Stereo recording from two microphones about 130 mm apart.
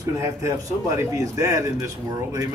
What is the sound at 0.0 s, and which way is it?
A man's voice, 25° right (ahead or behind).